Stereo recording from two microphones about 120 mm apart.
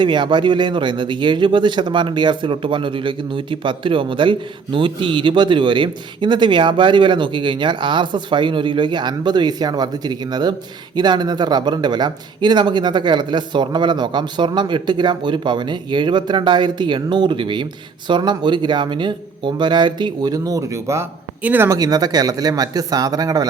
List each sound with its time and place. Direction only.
0.0 s speech: 40° right (ahead or behind); by 21.8 s 15° right (ahead or behind)
21.8 s speech: 30° right (ahead or behind)